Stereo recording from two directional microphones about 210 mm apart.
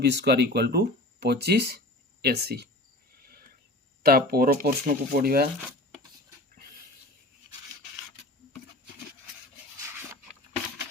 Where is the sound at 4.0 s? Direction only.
45° right (ahead or behind).